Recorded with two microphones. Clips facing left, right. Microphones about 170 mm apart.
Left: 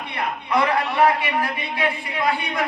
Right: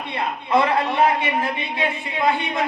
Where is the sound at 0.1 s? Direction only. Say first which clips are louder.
Right 3 dB; 25° right (ahead or behind).